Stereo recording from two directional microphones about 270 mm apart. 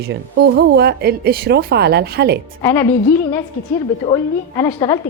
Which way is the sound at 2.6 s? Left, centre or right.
Centre.